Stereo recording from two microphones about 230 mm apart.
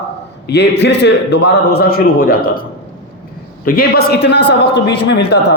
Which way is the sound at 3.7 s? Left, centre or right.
Left.